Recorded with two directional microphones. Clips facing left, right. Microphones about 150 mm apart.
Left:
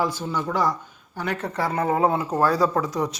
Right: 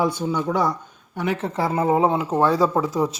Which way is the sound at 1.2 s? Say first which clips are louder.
Right 3 dB; 25° right (ahead or behind).